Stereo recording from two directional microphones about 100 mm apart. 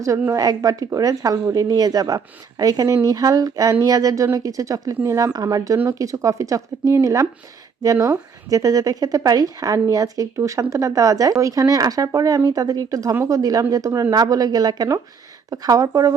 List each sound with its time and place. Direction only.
0.0 s speech: 30° right (ahead or behind)